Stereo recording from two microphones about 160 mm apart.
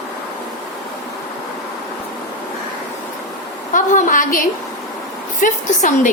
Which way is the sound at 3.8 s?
55° left (ahead or behind).